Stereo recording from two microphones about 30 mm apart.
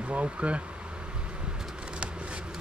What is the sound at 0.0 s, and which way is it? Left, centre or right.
Speech, right.